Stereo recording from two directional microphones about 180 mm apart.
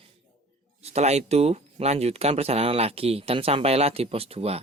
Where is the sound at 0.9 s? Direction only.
35° right (ahead or behind).